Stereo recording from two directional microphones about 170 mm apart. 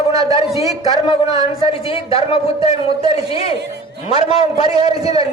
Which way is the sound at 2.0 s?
35° left (ahead or behind).